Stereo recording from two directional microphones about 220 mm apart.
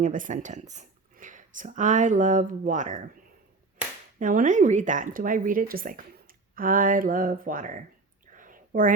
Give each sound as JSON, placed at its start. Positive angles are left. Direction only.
{"t": 0.0, "sound": "speech", "side_deg": -35}
{"t": 4.2, "sound": "speech", "side_deg": -35}
{"t": 8.3, "sound": "whispering", "side_deg": -40}